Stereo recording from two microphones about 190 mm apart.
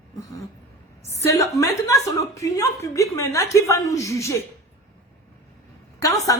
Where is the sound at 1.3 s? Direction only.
15° left (ahead or behind).